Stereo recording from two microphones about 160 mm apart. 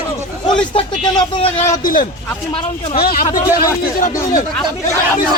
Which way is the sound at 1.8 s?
60° left (ahead or behind).